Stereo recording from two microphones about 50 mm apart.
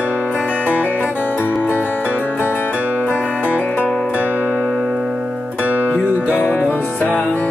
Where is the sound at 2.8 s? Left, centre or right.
Right.